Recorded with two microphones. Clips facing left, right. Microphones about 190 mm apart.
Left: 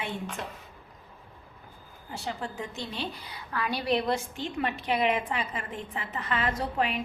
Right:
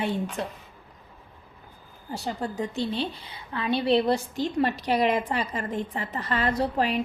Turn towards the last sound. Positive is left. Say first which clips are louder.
# right 5 dB
turn(degrees=-35)  # may be behind; listen again after turning